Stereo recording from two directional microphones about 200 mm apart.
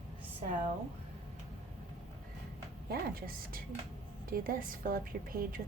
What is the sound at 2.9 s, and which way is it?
A woman's voice, 45° right (ahead or behind).